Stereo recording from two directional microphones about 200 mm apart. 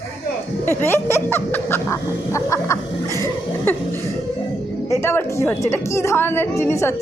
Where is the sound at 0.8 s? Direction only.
10° left (ahead or behind).